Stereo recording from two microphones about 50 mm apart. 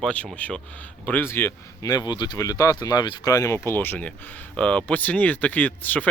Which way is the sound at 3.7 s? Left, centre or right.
Left.